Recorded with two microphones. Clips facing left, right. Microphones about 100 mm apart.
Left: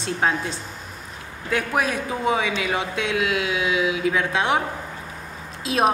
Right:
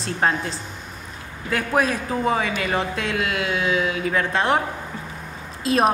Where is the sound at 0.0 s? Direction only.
Centre (ahead or behind).